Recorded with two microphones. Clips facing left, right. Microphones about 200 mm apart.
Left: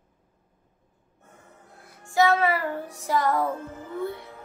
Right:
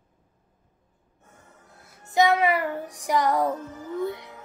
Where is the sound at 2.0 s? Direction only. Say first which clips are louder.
Right 1 dB; 20° right (ahead or behind).